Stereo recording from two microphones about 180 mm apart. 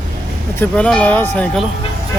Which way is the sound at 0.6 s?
5° left (ahead or behind).